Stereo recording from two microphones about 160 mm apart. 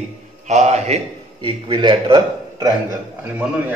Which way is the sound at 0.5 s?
45° right (ahead or behind).